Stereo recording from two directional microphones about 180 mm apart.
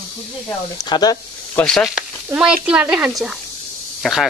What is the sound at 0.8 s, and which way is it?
Speech, 20° left (ahead or behind).